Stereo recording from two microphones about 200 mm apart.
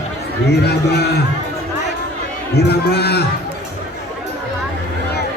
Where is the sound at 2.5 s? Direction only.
55° left (ahead or behind).